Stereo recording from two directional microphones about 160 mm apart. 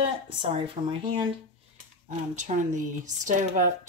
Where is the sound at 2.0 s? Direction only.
50° right (ahead or behind).